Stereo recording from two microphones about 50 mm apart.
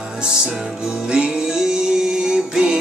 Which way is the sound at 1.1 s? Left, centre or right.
Centre.